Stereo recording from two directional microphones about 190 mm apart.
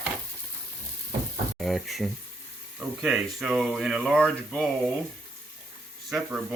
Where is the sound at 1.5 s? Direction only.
Centre (ahead or behind).